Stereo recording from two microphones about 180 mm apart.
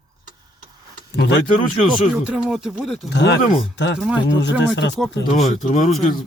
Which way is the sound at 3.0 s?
75° left (ahead or behind).